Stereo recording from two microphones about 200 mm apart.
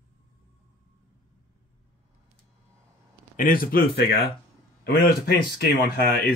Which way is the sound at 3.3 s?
45° left (ahead or behind).